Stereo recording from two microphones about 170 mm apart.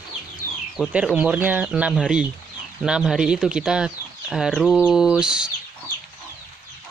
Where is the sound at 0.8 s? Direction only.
5° right (ahead or behind).